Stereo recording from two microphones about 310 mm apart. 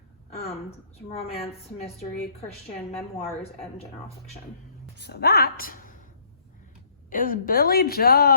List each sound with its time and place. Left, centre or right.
0.3 s a woman's voice: centre
3.4 s a woman's voice: centre
4.9 s a woman's voice: left
7.1 s a woman's voice: left